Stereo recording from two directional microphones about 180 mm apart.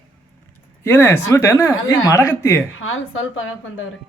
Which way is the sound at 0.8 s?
15° left (ahead or behind).